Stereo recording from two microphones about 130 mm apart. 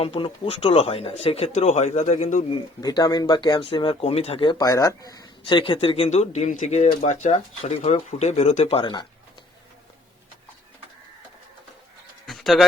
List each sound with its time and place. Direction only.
0.0 s speech: 50° left (ahead or behind)
2.8 s speech: 30° left (ahead or behind); by 4.4 s 50° left (ahead or behind)
4.4 s speech: 30° left (ahead or behind)
6.1 s speech: 60° left (ahead or behind)
12.2 s a sound: centre (ahead or behind)